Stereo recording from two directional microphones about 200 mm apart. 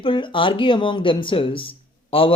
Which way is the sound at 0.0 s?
25° left (ahead or behind).